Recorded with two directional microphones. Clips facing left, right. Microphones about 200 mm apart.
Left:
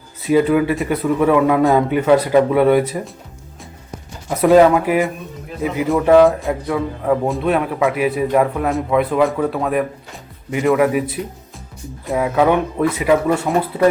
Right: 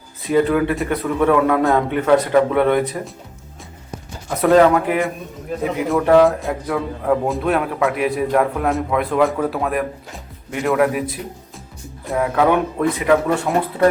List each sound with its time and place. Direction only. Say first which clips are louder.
0.3 s a man's voice: left 2 dB; 5° left (ahead or behind)
4.4 s a man's voice: left 2 dB; 5° left (ahead or behind)